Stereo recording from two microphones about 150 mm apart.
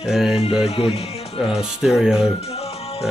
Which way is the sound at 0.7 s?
40° left (ahead or behind).